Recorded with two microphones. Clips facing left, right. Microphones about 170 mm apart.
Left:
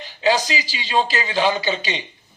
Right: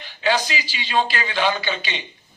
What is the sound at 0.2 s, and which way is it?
Speech, 35° left (ahead or behind).